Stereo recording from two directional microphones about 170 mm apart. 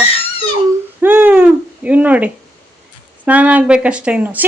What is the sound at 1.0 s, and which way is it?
A woman's voice, 10° right (ahead or behind).